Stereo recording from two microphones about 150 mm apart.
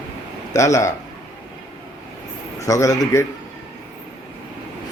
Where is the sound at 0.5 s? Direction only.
20° left (ahead or behind).